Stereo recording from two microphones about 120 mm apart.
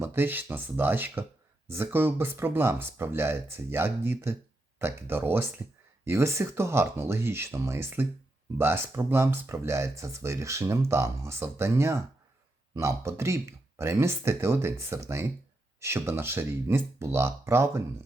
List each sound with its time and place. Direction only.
0.0 s speech: 20° right (ahead or behind)